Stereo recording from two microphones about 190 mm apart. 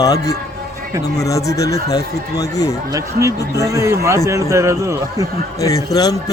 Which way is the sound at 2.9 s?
15° right (ahead or behind).